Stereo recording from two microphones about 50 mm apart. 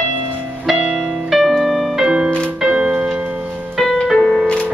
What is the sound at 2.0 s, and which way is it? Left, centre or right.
Music, centre.